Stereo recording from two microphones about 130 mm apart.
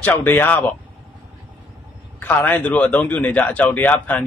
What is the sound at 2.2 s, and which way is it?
A man's voice, 15° left (ahead or behind).